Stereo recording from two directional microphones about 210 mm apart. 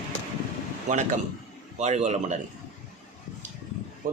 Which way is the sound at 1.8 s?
35° right (ahead or behind).